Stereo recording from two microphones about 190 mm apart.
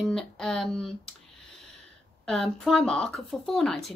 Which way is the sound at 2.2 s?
5° left (ahead or behind).